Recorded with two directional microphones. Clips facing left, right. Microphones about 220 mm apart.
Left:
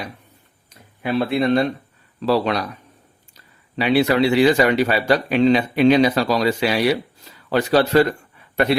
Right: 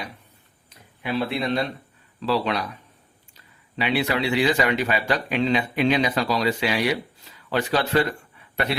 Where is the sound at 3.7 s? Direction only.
40° left (ahead or behind).